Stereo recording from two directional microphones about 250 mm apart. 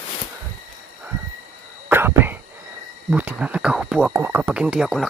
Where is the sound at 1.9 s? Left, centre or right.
Centre.